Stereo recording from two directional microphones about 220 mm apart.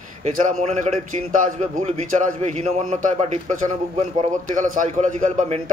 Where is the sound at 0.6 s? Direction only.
35° right (ahead or behind).